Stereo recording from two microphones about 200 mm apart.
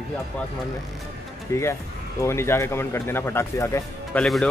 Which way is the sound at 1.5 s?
15° left (ahead or behind).